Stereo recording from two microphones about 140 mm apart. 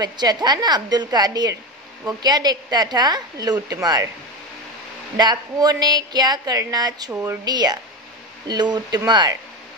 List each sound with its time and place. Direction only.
0.0 s a woman's voice: 30° right (ahead or behind)
5.1 s a woman's voice: 30° right (ahead or behind)
7.1 s speech: 10° right (ahead or behind)
7.4 s a woman's voice: 30° right (ahead or behind)